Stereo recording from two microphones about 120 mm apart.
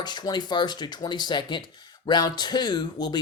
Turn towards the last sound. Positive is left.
turn(degrees=35)  # may be behind; listen again after turning